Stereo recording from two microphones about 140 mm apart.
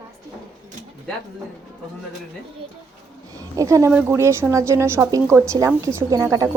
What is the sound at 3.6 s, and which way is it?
A woman's voice, 20° right (ahead or behind).